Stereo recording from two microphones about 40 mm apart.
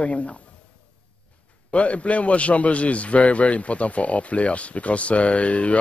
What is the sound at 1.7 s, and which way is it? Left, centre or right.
A man's voice, left.